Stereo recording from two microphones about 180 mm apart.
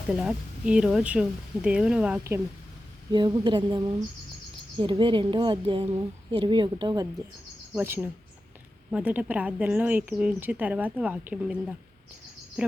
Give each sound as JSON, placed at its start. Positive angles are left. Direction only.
{"t": 0.1, "sound": "speech", "side_deg": -5}
{"t": 3.1, "sound": "a woman's voice", "side_deg": -25}
{"t": 12.6, "sound": "speech", "side_deg": -5}